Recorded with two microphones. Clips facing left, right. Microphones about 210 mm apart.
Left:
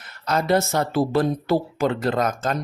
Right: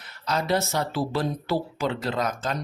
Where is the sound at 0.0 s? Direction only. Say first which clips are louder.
Left 4 dB; 50° left (ahead or behind).